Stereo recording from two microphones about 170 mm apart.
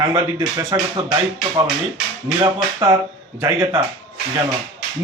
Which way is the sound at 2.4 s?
20° right (ahead or behind).